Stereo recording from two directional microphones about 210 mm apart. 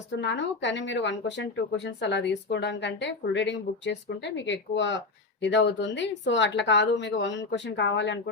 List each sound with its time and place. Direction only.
0.1 s speech: 55° left (ahead or behind)